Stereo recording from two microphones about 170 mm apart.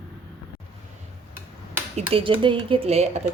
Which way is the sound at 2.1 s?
30° right (ahead or behind).